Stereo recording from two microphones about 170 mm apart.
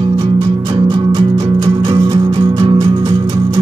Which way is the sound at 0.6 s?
25° right (ahead or behind).